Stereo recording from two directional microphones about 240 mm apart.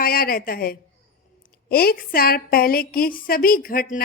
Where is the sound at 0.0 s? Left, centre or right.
Left.